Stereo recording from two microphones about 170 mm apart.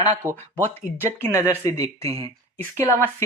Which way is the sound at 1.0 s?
15° left (ahead or behind).